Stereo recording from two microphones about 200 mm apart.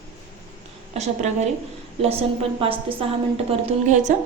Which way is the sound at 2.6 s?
25° right (ahead or behind).